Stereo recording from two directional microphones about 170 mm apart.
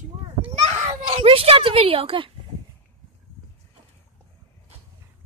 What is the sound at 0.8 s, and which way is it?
Speech, 35° right (ahead or behind).